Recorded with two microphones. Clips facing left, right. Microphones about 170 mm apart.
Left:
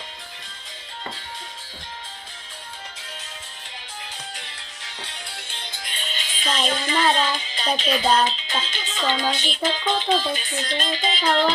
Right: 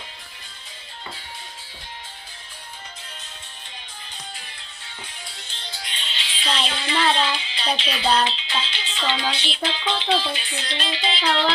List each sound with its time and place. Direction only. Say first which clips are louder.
4.4 s music: left 2 dB; 75° left (ahead or behind); by 11.5 s 45° left (ahead or behind)